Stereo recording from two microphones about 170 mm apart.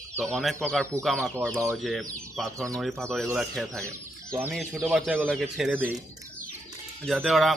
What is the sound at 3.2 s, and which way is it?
Speech, 5° right (ahead or behind).